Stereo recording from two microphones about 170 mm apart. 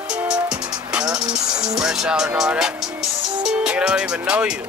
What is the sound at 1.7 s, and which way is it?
Speech, 5° right (ahead or behind).